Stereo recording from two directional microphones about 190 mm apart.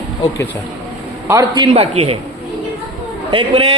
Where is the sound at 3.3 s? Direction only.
30° right (ahead or behind).